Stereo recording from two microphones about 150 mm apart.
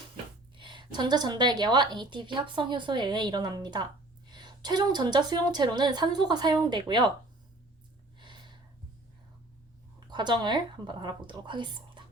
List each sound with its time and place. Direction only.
0.5 s a woman's voice: 30° right (ahead or behind)
8.2 s a sound: 30° right (ahead or behind)
10.1 s a woman's voice: 30° right (ahead or behind)